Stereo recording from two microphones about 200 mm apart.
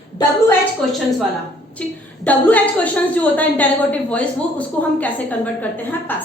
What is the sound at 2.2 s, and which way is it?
A woman's voice, 5° left (ahead or behind).